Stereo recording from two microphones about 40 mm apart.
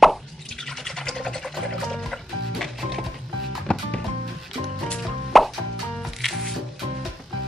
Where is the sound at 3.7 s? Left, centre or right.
Left.